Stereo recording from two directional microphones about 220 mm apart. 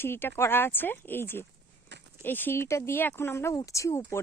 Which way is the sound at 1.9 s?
50° right (ahead or behind).